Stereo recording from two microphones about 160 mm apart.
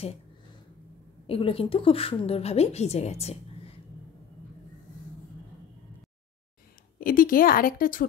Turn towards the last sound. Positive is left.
turn(degrees=60)  # may be behind; listen again after turning